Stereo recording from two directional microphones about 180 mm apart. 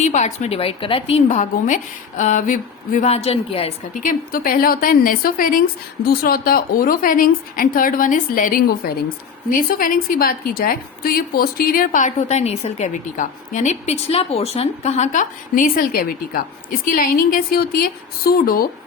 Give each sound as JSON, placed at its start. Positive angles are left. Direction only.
{"t": 0.0, "sound": "a woman's voice", "side_deg": 40}
{"t": 1.4, "sound": "a woman's voice", "side_deg": 45}
{"t": 4.0, "sound": "a woman's voice", "side_deg": 50}